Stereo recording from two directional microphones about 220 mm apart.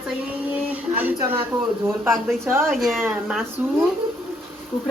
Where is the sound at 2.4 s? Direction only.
10° right (ahead or behind).